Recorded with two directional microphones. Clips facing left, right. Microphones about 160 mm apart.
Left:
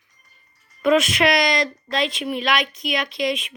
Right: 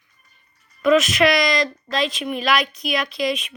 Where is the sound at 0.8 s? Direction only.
25° left (ahead or behind).